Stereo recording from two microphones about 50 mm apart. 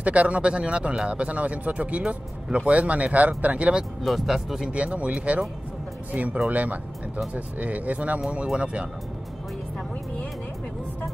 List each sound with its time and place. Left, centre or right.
0.0 s speech: right
4.0 s speech: centre
4.7 s speech: right